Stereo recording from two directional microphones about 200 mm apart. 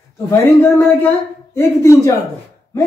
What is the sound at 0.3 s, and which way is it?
A woman's voice, 10° left (ahead or behind).